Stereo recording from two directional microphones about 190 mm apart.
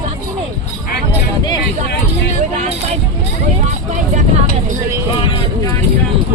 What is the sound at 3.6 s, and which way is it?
Vehicle, 40° right (ahead or behind).